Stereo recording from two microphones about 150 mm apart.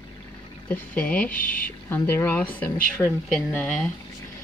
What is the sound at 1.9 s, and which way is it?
Speech, 15° left (ahead or behind).